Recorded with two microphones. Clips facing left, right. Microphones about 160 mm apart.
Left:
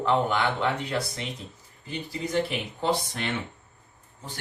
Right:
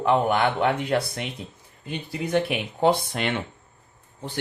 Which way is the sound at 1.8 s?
65° right (ahead or behind).